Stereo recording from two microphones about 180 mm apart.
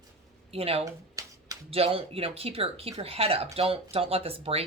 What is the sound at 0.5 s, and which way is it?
Speech, 35° right (ahead or behind).